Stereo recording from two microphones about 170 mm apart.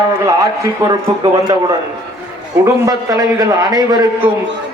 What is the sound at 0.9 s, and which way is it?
Speech, 25° right (ahead or behind).